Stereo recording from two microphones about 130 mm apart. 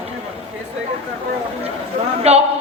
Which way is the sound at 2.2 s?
55° right (ahead or behind).